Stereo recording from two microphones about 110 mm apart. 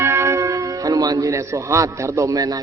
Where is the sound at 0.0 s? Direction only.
25° right (ahead or behind).